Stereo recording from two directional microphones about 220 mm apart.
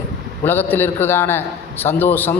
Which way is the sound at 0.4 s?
10° left (ahead or behind).